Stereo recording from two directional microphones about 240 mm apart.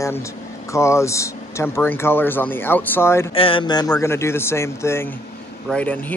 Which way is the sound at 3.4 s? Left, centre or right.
Left.